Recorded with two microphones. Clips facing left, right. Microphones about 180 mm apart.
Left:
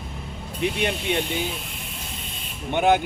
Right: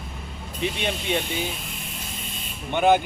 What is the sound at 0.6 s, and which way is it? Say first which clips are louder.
Speech: left 2 dB; 60° left (ahead or behind).